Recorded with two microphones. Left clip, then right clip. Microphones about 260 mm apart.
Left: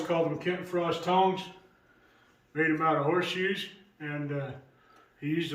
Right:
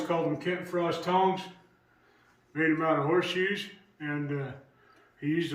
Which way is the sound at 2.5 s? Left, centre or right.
Centre.